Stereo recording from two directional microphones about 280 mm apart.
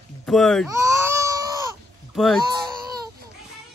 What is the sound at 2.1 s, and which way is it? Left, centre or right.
Speech, centre.